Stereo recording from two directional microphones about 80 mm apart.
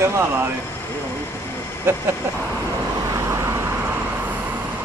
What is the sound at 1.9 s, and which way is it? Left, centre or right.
Speech, right.